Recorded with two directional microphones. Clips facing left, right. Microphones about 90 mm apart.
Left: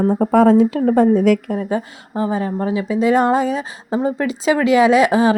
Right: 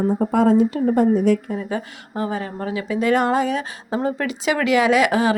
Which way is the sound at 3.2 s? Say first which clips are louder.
Left 3 dB; 30° left (ahead or behind).